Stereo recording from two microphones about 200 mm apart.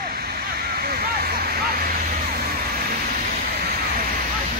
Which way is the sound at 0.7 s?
50° right (ahead or behind).